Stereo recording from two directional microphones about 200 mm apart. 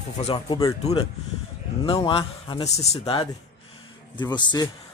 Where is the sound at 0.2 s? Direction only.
25° left (ahead or behind).